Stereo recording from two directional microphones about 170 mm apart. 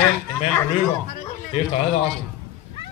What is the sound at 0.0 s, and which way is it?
Speech, 10° left (ahead or behind).